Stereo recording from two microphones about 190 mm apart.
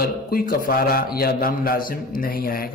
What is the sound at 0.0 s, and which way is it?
A man's voice, 50° left (ahead or behind).